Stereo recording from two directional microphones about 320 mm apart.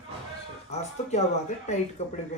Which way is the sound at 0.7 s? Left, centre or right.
Centre.